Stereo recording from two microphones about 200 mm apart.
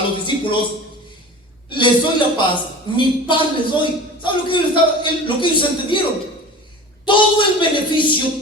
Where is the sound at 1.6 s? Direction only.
25° left (ahead or behind).